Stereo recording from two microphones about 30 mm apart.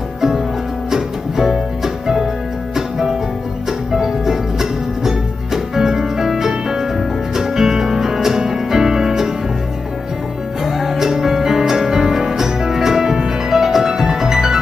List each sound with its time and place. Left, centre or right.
0.8 s music: centre
3.9 s music: centre
10.6 s music: centre